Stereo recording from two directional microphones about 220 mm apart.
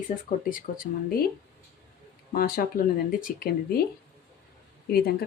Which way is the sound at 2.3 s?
40° left (ahead or behind).